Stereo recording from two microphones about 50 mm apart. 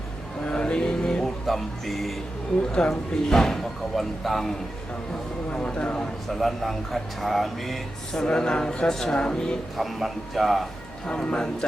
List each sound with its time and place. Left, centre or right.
0.4 s a sound: centre
1.2 s speech: centre
5.5 s speech: left
6.2 s speech: centre
9.7 s speech: centre
11.0 s speech: centre